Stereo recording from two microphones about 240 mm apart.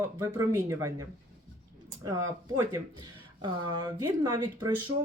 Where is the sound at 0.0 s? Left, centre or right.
Centre.